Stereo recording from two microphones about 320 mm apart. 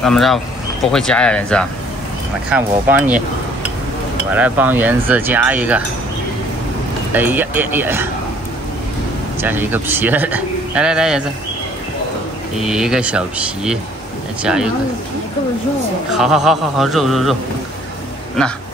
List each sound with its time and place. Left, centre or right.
0.0 s speech: centre
4.4 s speech: centre
7.2 s speech: centre
9.4 s speech: centre
12.5 s speech: centre
16.1 s speech: centre